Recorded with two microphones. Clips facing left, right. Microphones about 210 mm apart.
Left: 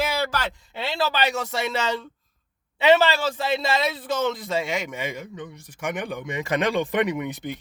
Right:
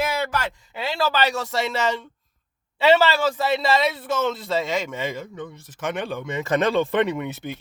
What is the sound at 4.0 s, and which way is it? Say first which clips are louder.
A man's voice: right 1 dB; 15° left (ahead or behind).